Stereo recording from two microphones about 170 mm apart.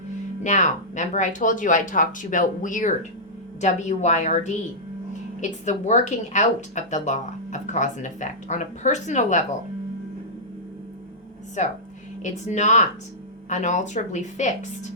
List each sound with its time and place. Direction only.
0.4 s speech: 45° left (ahead or behind)
5.6 s speech: 45° left (ahead or behind)
11.6 s speech: 45° left (ahead or behind)